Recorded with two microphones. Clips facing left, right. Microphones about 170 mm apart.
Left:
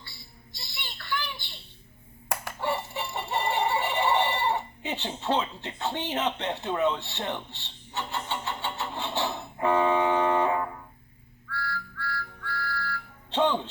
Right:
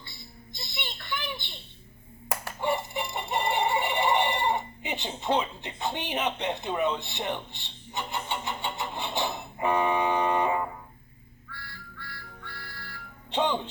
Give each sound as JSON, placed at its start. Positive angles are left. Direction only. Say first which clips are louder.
{"t": 0.0, "sound": "a sound", "louder": "right 3 dB", "side_deg": -20}
{"t": 2.6, "sound": "chicken", "louder": "right 2 dB", "side_deg": -15}
{"t": 11.5, "sound": "music", "louder": "left 11 dB", "side_deg": -20}